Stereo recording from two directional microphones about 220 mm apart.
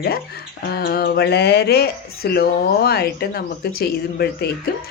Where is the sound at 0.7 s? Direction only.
45° left (ahead or behind).